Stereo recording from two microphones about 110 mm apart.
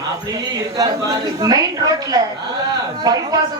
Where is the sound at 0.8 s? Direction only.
35° right (ahead or behind).